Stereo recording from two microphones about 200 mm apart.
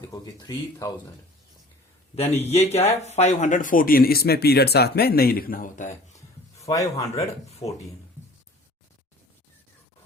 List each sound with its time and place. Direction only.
0.1 s speech: 15° left (ahead or behind)
2.5 s speech: 30° left (ahead or behind)
6.1 s a sound: 15° left (ahead or behind)
7.6 s speech: 15° left (ahead or behind)